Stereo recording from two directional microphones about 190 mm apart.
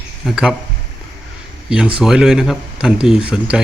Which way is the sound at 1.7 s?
5° right (ahead or behind).